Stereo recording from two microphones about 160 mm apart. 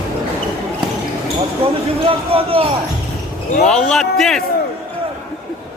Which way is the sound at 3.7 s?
5° left (ahead or behind).